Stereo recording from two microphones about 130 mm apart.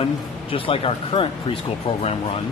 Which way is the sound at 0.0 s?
45° left (ahead or behind).